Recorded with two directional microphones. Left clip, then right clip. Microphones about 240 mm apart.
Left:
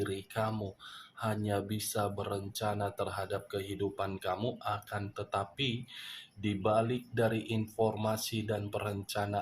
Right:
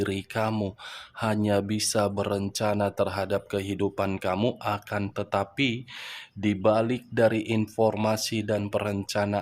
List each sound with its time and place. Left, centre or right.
0.0 s speech: right